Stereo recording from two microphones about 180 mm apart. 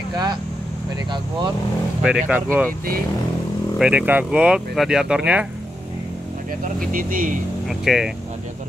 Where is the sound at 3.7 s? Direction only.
5° right (ahead or behind).